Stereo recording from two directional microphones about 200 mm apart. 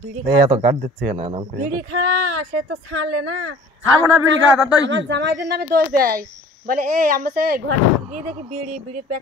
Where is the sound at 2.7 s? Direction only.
90° right.